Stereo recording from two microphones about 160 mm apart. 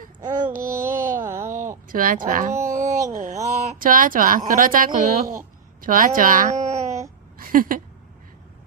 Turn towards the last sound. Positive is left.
turn(degrees=-60)  # may be behind; listen again after turning